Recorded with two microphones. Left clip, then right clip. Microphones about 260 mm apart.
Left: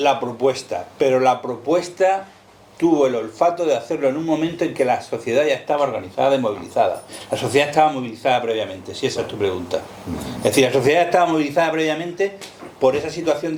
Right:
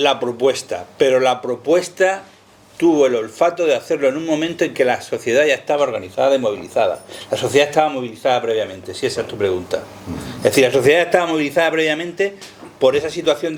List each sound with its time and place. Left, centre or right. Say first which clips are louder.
0.0 s speech: right 2 dB; right